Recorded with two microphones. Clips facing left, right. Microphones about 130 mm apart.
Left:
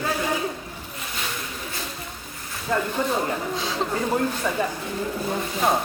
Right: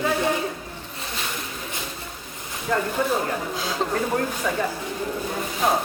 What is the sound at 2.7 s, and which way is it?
Speech, 5° left (ahead or behind).